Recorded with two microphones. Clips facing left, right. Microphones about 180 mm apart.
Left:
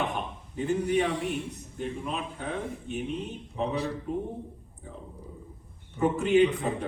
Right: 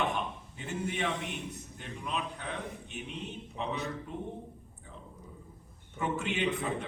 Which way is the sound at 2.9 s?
35° left (ahead or behind).